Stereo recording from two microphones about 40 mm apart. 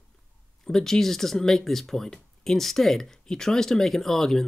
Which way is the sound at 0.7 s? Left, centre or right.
Centre.